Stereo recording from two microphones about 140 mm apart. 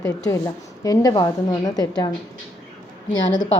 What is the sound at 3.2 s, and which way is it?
Speech, 30° left (ahead or behind).